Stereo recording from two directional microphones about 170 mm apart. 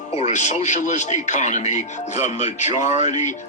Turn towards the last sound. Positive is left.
turn(degrees=45)  # may be behind; listen again after turning